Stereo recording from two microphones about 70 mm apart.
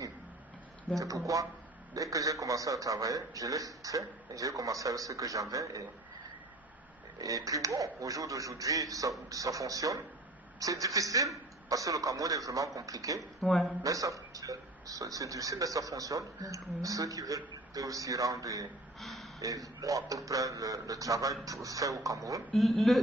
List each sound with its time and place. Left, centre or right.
0.9 s a man's voice: right
7.2 s a man's voice: right
13.4 s speech: centre
13.8 s a man's voice: right
18.9 s a man's voice: centre
19.4 s a man's voice: right
22.5 s speech: centre